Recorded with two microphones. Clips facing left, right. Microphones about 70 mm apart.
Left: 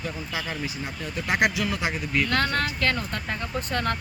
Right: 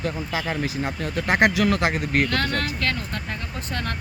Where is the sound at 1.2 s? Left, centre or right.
Right.